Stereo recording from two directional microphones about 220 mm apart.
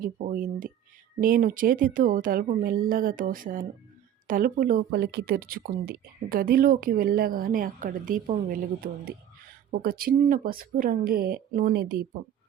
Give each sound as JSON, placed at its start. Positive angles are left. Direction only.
{"t": 0.0, "sound": "a woman's voice", "side_deg": -35}